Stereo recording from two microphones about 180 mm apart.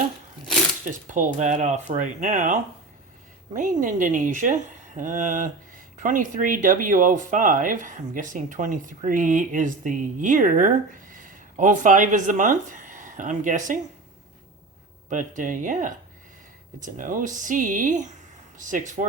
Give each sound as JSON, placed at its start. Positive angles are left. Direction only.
{"t": 0.9, "sound": "speech", "side_deg": -45}
{"t": 15.1, "sound": "speech", "side_deg": -45}